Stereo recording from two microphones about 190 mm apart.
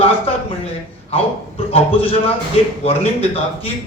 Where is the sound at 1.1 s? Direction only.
30° left (ahead or behind).